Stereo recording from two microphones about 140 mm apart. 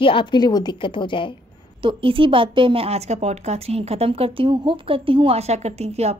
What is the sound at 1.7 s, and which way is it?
A woman's voice, 40° right (ahead or behind).